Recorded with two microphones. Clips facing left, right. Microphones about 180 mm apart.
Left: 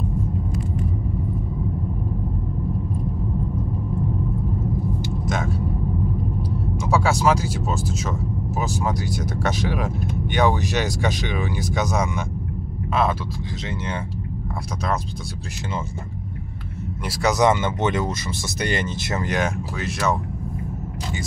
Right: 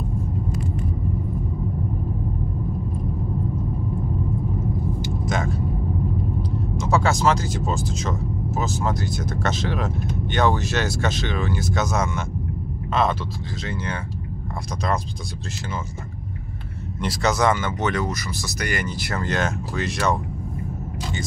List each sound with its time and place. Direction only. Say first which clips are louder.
5.2 s vehicle: right 2 dB; centre (ahead or behind)
6.8 s speech: even; 10° left (ahead or behind)
17.0 s speech: left 2 dB; 10° left (ahead or behind)